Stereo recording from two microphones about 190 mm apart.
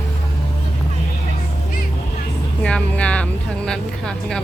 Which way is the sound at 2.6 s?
5° left (ahead or behind).